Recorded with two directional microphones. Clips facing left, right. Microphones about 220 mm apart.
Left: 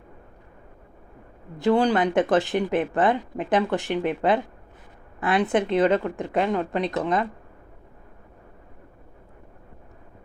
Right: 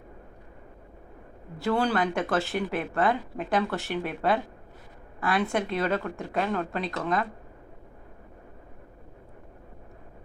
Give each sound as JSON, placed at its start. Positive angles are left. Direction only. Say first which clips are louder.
{"t": 1.5, "sound": "a woman's voice", "louder": "left 5 dB", "side_deg": 15}